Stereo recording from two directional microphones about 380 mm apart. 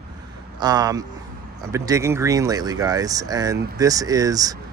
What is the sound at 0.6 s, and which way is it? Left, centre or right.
Speech, centre.